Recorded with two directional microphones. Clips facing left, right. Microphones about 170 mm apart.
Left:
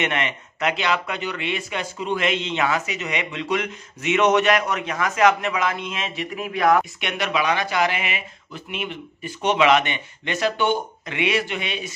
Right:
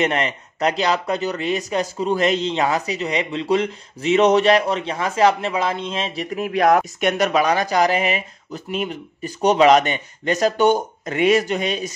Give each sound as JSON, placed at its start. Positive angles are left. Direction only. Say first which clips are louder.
{"t": 0.0, "sound": "speech", "louder": "right 4 dB", "side_deg": -35}